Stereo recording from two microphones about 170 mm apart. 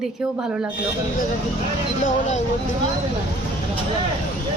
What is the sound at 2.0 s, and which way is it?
Speech, 45° left (ahead or behind).